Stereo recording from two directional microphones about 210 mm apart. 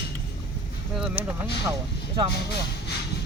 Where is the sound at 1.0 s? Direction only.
5° right (ahead or behind).